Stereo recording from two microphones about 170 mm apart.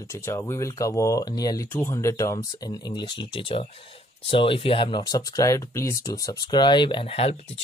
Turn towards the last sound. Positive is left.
turn(degrees=35)  # may be behind; listen again after turning